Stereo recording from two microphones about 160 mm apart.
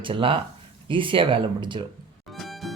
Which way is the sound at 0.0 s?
35° right (ahead or behind).